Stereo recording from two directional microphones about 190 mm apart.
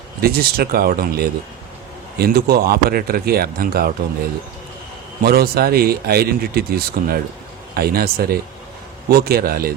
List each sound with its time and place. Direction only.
0.2 s speech: 55° right (ahead or behind)
5.2 s speech: 55° right (ahead or behind)